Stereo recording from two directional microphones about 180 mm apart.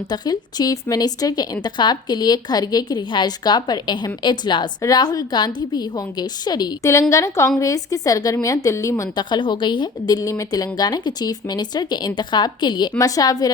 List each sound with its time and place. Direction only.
0.1 s a woman's voice: 20° left (ahead or behind)